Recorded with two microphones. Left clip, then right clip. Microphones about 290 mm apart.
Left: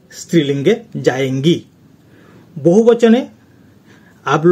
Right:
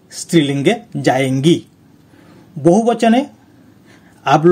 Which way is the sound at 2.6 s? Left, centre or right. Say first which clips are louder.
Left 2 dB; right.